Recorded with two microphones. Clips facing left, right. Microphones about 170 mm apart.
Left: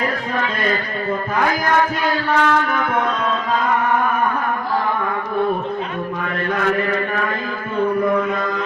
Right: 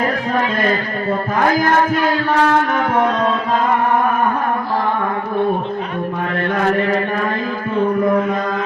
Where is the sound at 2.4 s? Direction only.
40° right (ahead or behind).